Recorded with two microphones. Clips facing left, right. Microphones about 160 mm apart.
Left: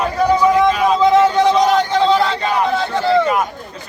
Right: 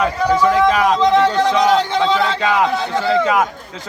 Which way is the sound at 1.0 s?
5° left (ahead or behind).